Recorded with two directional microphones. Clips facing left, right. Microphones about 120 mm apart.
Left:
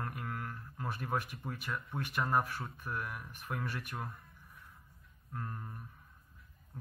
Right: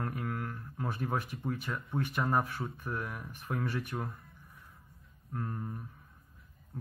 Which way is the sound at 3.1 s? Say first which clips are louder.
Right 3 dB; centre (ahead or behind).